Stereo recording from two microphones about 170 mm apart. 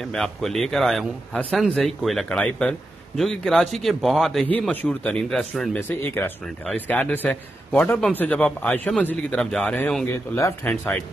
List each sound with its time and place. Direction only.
0.0 s speech: centre (ahead or behind)
10.1 s speech: 15° left (ahead or behind)